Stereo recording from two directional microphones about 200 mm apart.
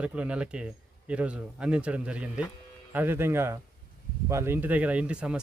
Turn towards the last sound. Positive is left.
turn(degrees=-5)  # may be behind; listen again after turning